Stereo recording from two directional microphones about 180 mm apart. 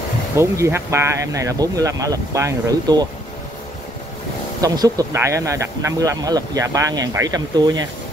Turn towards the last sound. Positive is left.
turn(degrees=-20)  # may be behind; listen again after turning